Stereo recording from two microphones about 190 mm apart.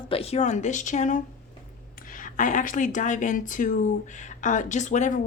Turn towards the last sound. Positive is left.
turn(degrees=40)  # may be behind; listen again after turning